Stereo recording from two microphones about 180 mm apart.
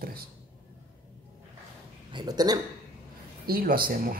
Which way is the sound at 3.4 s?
55° right (ahead or behind).